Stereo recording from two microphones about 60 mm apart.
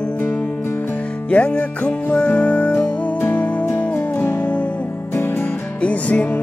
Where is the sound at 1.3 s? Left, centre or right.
Left.